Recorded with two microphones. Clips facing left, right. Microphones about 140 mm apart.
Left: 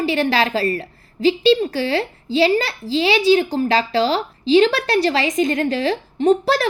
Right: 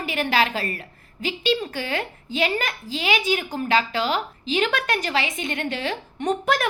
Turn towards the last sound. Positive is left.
turn(degrees=35)  # may be behind; listen again after turning